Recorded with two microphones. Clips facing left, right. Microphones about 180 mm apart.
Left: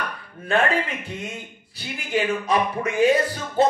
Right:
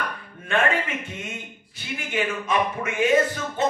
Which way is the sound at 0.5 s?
35° left (ahead or behind).